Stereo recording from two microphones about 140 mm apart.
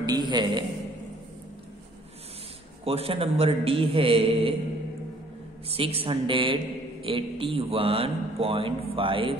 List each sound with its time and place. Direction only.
0.0 s a man's voice: 30° right (ahead or behind)
2.8 s a man's voice: 45° right (ahead or behind)
5.7 s a man's voice: 45° right (ahead or behind)